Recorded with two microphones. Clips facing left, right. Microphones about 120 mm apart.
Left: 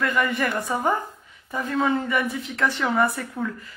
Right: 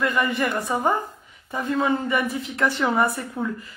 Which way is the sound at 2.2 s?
35° right (ahead or behind).